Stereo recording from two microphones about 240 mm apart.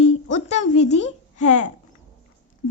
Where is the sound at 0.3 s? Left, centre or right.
Left.